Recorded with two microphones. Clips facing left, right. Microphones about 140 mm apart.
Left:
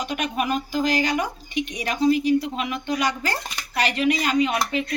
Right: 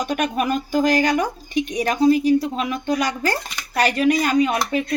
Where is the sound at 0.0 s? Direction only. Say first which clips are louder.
Right 4 dB; 45° right (ahead or behind).